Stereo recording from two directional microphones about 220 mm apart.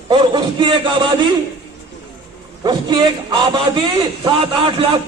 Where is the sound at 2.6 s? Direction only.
20° right (ahead or behind).